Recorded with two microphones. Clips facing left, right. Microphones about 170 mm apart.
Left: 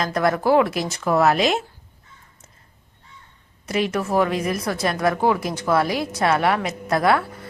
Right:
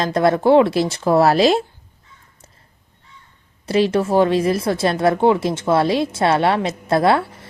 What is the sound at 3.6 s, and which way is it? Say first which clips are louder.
Speech: right 6 dB; 30° right (ahead or behind).